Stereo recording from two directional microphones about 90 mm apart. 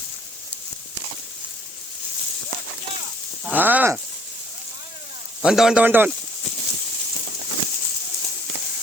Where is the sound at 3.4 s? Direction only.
20° right (ahead or behind).